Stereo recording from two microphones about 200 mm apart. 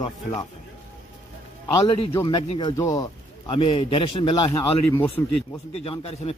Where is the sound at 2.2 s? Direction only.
20° left (ahead or behind).